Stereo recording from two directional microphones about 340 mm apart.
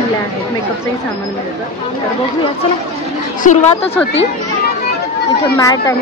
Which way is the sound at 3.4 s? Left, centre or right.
Left.